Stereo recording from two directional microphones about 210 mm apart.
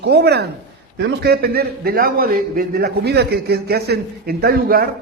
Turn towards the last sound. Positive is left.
turn(degrees=-45)  # may be behind; listen again after turning